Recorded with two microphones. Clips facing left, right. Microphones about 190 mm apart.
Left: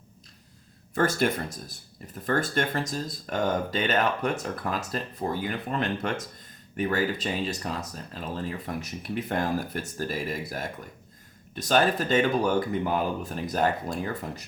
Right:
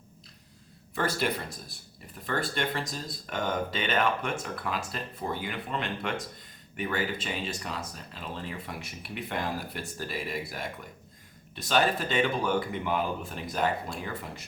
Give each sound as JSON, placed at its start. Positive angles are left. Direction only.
{"t": 0.9, "sound": "speech", "side_deg": 45}
{"t": 11.5, "sound": "speech", "side_deg": 45}